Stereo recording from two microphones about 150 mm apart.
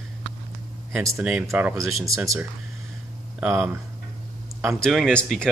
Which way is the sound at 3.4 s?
Centre (ahead or behind).